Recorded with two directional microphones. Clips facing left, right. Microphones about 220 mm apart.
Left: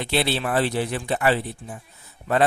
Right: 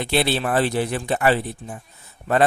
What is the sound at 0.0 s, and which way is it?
Speech, 45° right (ahead or behind).